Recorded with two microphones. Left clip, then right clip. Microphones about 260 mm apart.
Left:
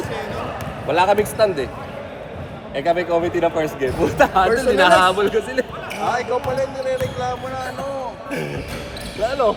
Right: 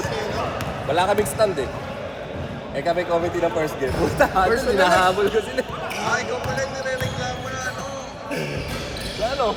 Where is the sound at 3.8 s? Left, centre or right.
Left.